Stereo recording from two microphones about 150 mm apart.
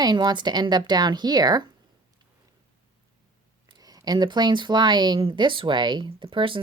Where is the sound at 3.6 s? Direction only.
25° right (ahead or behind).